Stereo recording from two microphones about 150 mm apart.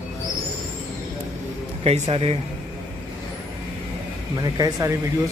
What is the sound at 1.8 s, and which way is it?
Speech, 45° right (ahead or behind).